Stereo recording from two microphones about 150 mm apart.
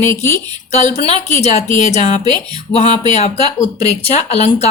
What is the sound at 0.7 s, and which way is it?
Speech, 45° left (ahead or behind).